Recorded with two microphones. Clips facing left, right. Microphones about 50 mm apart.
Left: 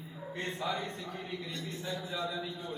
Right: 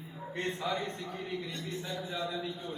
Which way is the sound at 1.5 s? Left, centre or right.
Right.